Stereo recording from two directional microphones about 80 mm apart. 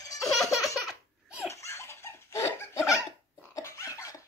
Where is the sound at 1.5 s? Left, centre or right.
Left.